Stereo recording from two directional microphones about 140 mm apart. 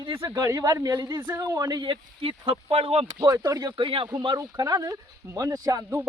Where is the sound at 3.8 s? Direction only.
40° right (ahead or behind); by 6.1 s 20° right (ahead or behind).